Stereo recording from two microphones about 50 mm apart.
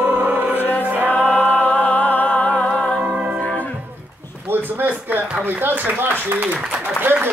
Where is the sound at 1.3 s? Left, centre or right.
Left.